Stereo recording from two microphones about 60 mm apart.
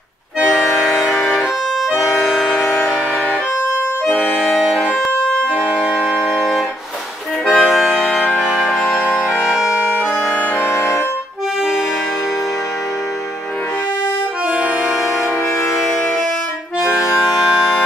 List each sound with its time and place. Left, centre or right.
2.2 s music: centre
4.0 s accordion: centre
5.2 s music: centre
5.7 s music: centre
6.2 s organ: centre
7.5 s accordion: centre
7.9 s music: centre
10.7 s music: left